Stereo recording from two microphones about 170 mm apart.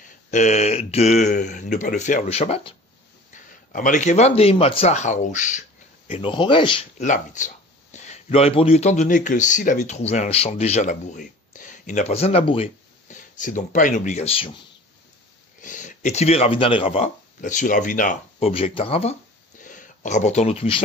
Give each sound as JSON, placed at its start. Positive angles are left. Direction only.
{"t": 0.3, "sound": "speech", "side_deg": 45}
{"t": 3.7, "sound": "speech", "side_deg": 50}
{"t": 6.0, "sound": "speech", "side_deg": 30}
{"t": 7.0, "sound": "speech", "side_deg": 45}
{"t": 13.1, "sound": "speech", "side_deg": 50}
{"t": 15.6, "sound": "speech", "side_deg": 50}
{"t": 18.5, "sound": "speech", "side_deg": 35}
{"t": 19.6, "sound": "speech", "side_deg": 50}